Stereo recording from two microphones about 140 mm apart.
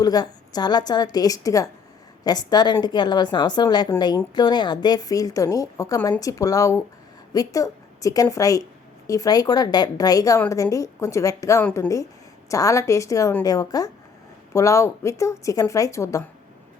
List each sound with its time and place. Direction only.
0.0 s a woman's voice: 30° left (ahead or behind)